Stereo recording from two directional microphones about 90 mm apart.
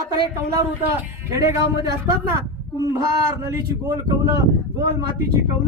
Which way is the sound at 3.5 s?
35° right (ahead or behind).